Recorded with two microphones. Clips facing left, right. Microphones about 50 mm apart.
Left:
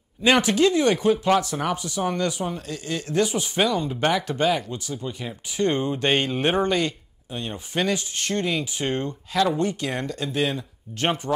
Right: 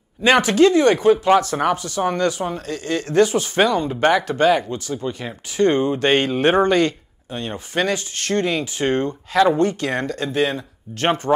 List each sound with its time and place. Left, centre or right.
0.2 s speech: right
1.0 s speech: right
1.6 s speech: right
3.9 s speech: right
10.5 s speech: right